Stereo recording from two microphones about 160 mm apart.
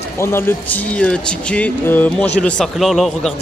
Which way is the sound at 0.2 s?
15° left (ahead or behind).